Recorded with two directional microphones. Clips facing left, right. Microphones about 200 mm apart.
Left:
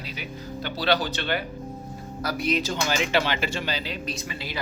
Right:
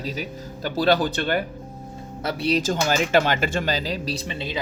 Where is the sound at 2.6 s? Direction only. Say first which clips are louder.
Right 4 dB; 45° right (ahead or behind).